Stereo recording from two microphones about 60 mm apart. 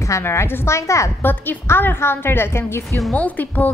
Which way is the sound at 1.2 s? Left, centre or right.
Left.